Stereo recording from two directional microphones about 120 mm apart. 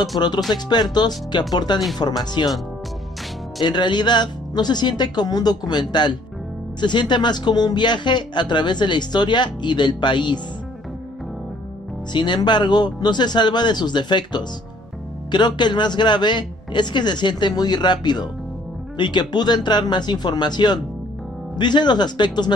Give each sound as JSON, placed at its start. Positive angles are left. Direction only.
{"t": 0.2, "sound": "speech", "side_deg": 40}
{"t": 3.6, "sound": "speech", "side_deg": 40}
{"t": 12.1, "sound": "speech", "side_deg": 40}